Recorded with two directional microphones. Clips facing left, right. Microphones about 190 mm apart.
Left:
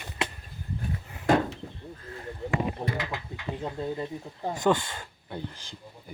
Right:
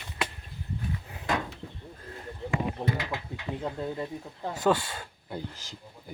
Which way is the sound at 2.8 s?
10° left (ahead or behind).